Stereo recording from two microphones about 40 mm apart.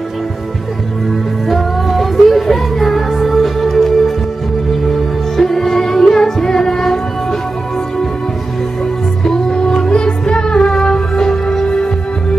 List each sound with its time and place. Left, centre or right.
1.5 s music: centre
9.2 s music: centre